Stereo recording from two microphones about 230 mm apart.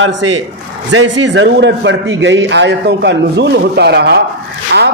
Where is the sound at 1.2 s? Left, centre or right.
Right.